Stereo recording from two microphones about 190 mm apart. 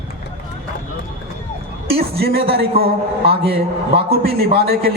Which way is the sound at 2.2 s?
55° right (ahead or behind).